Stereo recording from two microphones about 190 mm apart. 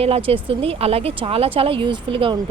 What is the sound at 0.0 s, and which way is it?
Speech, 30° right (ahead or behind).